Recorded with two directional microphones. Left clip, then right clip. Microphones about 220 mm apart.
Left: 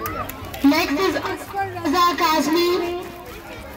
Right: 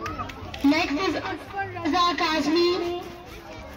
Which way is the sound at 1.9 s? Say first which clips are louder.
Left 5 dB; 50° left (ahead or behind).